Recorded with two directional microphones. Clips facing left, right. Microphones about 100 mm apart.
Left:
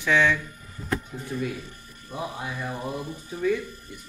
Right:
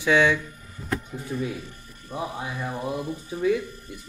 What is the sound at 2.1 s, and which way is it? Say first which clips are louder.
Speech: right 1 dB; 5° right (ahead or behind).